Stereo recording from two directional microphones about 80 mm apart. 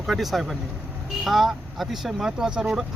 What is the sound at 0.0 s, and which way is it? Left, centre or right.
Speech, centre.